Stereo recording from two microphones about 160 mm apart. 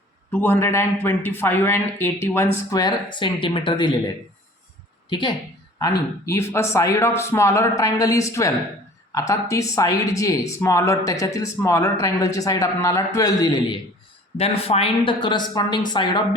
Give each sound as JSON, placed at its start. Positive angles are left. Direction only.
{"t": 0.3, "sound": "a man's voice", "side_deg": 10}
{"t": 5.0, "sound": "speech", "side_deg": 30}
{"t": 14.3, "sound": "speech", "side_deg": 40}